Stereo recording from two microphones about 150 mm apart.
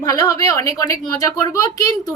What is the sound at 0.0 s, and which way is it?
A woman's voice, 20° left (ahead or behind).